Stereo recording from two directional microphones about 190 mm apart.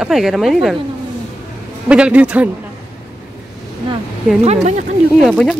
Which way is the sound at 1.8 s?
5° right (ahead or behind).